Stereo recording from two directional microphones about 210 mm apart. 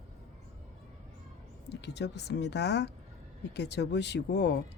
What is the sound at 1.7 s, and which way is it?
Speech, 55° left (ahead or behind).